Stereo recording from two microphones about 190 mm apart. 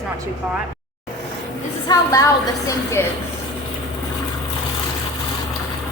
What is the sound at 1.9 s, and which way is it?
A woman's voice, 15° left (ahead or behind).